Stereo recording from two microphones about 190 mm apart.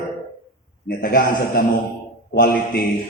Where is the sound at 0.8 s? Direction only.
50° left (ahead or behind).